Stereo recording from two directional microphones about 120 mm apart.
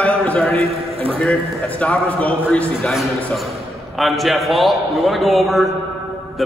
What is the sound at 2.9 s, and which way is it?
A man's voice, centre (ahead or behind).